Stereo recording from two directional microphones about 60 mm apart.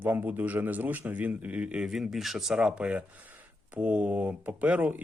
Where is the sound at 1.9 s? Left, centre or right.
Centre; by 5.0 s right.